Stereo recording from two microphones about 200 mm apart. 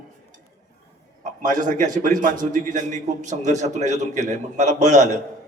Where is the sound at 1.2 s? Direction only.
40° right (ahead or behind).